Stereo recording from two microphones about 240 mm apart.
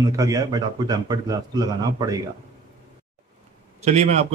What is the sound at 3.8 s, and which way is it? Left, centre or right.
Speech, right.